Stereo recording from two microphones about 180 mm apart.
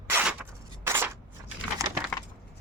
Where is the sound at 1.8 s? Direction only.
20° right (ahead or behind).